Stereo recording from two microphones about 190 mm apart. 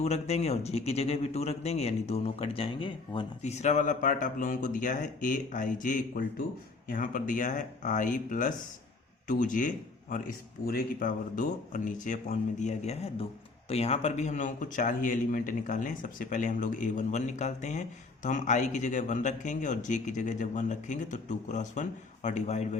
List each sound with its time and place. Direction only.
0.0 s a man's voice: 35° left (ahead or behind)